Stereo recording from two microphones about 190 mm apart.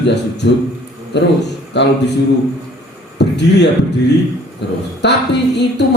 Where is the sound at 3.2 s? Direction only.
65° left (ahead or behind).